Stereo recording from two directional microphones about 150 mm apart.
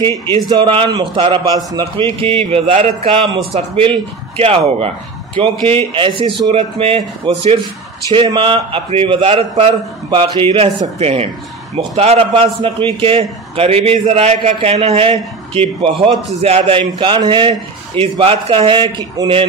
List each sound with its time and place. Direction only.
0.1 s a man's voice: 30° right (ahead or behind)